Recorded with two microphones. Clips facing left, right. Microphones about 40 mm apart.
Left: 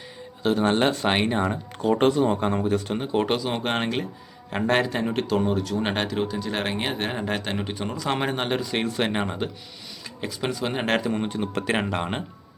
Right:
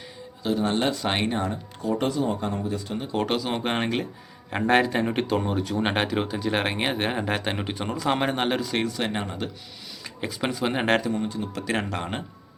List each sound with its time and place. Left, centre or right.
0.4 s speech: left
1.0 s speech: centre
1.5 s speech: left
2.5 s a man's voice: left
3.2 s speech: centre
8.9 s speech: left
10.0 s speech: centre
11.1 s speech: left
11.6 s speech: left
11.9 s speech: centre